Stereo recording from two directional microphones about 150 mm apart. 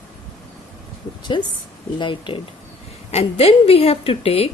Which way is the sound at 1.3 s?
30° left (ahead or behind).